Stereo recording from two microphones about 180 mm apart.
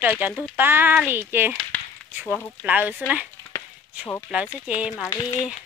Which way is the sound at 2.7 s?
10° right (ahead or behind).